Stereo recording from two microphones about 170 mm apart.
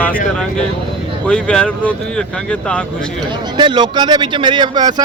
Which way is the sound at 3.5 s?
25° right (ahead or behind).